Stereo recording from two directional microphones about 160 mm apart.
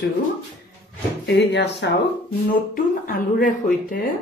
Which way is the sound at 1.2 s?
90° left.